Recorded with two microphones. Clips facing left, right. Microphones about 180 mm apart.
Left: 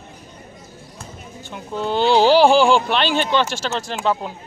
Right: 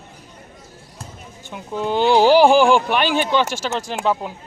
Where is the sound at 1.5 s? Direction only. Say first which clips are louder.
Right 1 dB; 15° right (ahead or behind).